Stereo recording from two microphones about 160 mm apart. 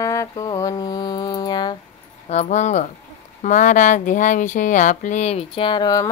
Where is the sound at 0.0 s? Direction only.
20° left (ahead or behind).